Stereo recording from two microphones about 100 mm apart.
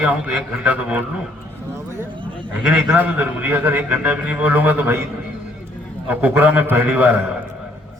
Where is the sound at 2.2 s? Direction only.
55° right (ahead or behind).